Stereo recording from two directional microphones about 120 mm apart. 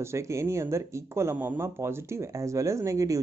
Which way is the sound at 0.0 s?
25° right (ahead or behind).